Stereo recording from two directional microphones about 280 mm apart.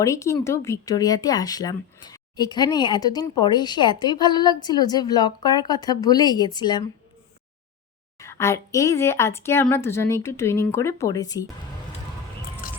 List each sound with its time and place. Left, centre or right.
0.0 s speech: centre
8.2 s speech: centre
12.6 s a sound: left